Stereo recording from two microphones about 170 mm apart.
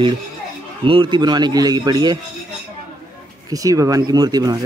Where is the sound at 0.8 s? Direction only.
30° right (ahead or behind).